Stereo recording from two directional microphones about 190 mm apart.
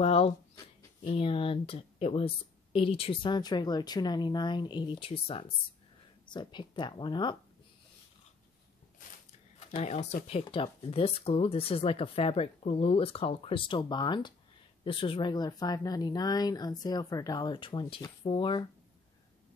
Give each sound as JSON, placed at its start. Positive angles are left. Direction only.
{"t": 0.0, "sound": "speech", "side_deg": 30}
{"t": 9.7, "sound": "speech", "side_deg": 35}